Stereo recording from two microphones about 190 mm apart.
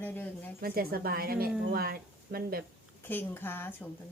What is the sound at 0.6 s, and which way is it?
A woman's voice, 50° right (ahead or behind).